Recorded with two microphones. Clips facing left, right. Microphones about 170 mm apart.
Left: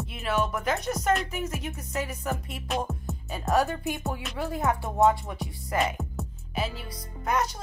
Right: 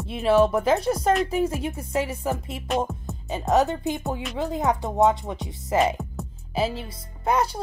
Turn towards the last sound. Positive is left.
turn(degrees=-30)  # may be behind; listen again after turning